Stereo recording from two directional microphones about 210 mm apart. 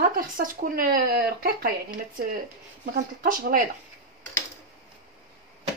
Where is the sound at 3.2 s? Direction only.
40° right (ahead or behind).